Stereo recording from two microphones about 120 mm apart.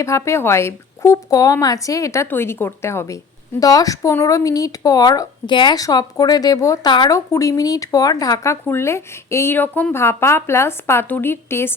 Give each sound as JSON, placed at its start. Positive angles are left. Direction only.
{"t": 0.0, "sound": "speech", "side_deg": 25}